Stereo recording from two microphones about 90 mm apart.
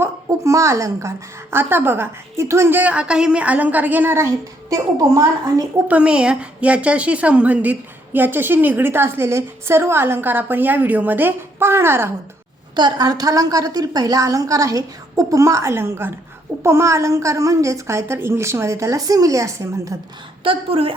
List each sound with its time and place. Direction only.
0.0 s a woman's voice: 35° right (ahead or behind)
4.9 s a woman's voice: 40° right (ahead or behind)
5.9 s a woman's voice: 10° right (ahead or behind); by 12.1 s 25° right (ahead or behind)
12.7 s a woman's voice: 55° right (ahead or behind); by 20.0 s 35° right (ahead or behind)
20.4 s a woman's voice: 85° right